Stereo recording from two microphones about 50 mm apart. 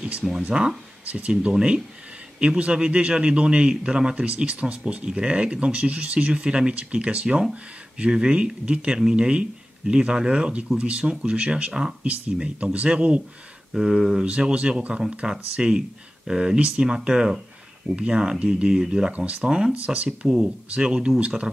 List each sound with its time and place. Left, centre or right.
0.5 s a man's voice: centre
13.7 s speech: centre
14.2 s a man's voice: right
20.2 s speech: centre
20.7 s a man's voice: right